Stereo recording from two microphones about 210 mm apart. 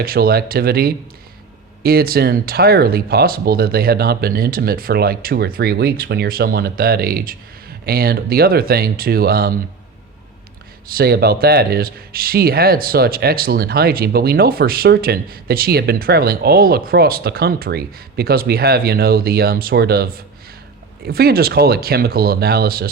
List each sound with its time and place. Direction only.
0.0 s speech: 45° right (ahead or behind)
10.8 s speech: 45° right (ahead or behind)